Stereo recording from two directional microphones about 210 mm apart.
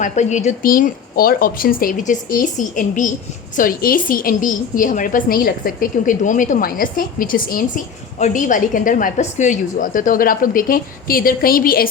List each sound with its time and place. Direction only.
0.0 s a woman's voice: 35° left (ahead or behind)